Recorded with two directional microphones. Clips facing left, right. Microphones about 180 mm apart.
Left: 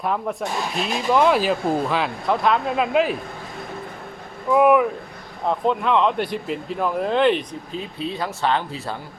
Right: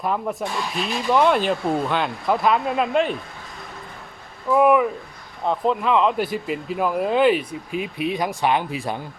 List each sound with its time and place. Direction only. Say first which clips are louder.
0.0 s speech: even; centre (ahead or behind)
4.4 s speech: left 1 dB; centre (ahead or behind); by 9.0 s 15° right (ahead or behind)